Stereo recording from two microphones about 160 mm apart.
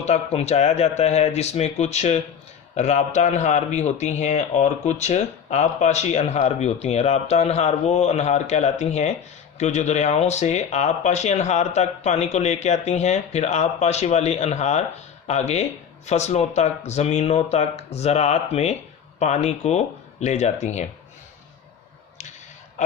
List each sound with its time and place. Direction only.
0.0 s a man's voice: 40° left (ahead or behind)